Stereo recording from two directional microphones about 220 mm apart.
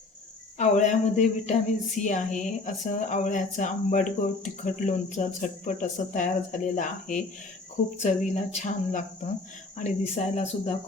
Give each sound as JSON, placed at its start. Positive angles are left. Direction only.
{"t": 0.6, "sound": "speech", "side_deg": 35}